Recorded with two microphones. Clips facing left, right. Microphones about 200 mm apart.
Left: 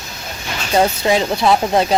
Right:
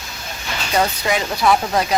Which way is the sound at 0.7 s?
30° left (ahead or behind).